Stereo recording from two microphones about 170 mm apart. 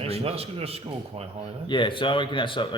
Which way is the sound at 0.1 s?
35° right (ahead or behind).